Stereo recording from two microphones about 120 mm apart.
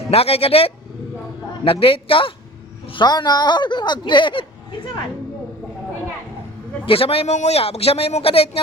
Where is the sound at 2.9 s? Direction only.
35° left (ahead or behind).